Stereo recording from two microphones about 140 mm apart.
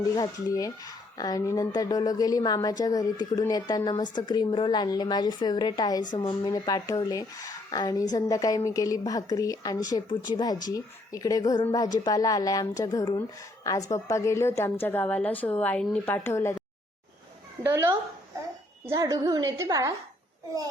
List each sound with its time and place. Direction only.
0.0 s a woman's voice: 25° left (ahead or behind); by 16.1 s 10° left (ahead or behind)
16.1 s speech: 20° left (ahead or behind)
17.6 s a woman's voice: 15° right (ahead or behind)